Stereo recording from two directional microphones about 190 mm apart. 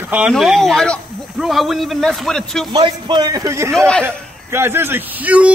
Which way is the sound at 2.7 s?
25° right (ahead or behind).